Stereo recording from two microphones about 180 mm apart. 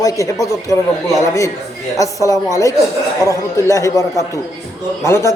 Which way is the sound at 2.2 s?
20° left (ahead or behind).